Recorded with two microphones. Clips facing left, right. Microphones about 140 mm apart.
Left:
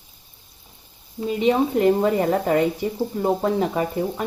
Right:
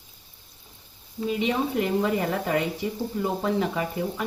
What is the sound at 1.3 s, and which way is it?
Speech, 40° left (ahead or behind).